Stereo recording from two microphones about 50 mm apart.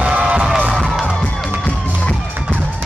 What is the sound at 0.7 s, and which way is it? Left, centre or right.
Music, centre.